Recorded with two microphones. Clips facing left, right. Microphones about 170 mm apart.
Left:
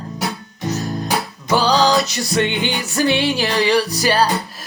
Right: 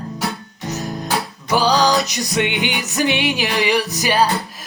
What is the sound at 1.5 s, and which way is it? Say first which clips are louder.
Music: left 1 dB; 15° right (ahead or behind).